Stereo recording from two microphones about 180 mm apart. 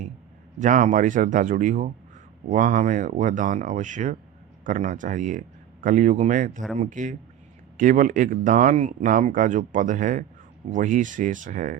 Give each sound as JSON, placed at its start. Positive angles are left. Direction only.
{"t": 0.6, "sound": "speech", "side_deg": -45}